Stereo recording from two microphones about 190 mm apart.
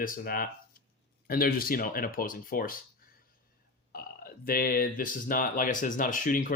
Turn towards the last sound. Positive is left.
turn(degrees=45)  # may be behind; listen again after turning